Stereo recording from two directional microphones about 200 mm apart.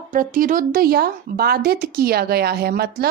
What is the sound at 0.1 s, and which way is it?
Speech, 45° right (ahead or behind).